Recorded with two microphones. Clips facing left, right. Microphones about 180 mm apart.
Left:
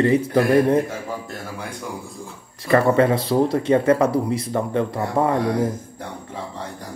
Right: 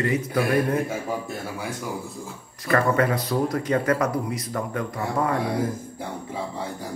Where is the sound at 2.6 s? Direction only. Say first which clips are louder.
Left 5 dB; 25° left (ahead or behind).